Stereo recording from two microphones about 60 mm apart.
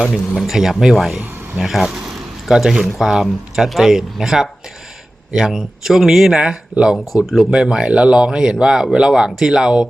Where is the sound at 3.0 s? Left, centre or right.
Centre.